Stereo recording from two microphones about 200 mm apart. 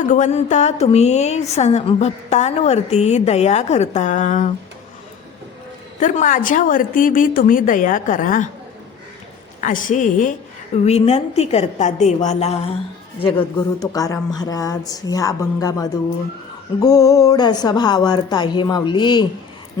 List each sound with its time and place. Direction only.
0.0 s a woman's voice: 40° left (ahead or behind)
6.0 s a woman's voice: 40° left (ahead or behind)
9.6 s a woman's voice: 40° left (ahead or behind)
13.2 s a woman's voice: 20° left (ahead or behind)